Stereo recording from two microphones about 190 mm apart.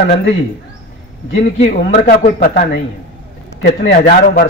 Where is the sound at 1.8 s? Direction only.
45° left (ahead or behind).